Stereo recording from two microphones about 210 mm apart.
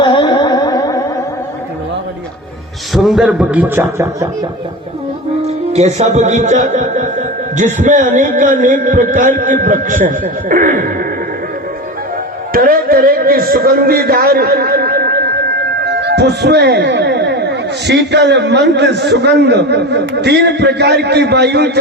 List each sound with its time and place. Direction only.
0.0 s music: 20° left (ahead or behind)
2.9 s a man's voice: centre (ahead or behind)
5.7 s a man's voice: 30° right (ahead or behind)
12.5 s a man's voice: 45° right (ahead or behind)